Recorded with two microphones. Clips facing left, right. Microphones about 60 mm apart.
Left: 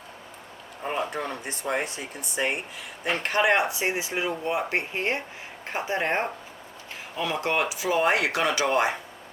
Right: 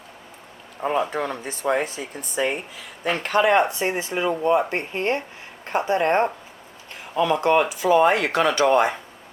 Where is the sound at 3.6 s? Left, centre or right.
Right.